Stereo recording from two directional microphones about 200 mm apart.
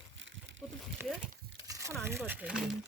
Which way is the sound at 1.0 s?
10° right (ahead or behind).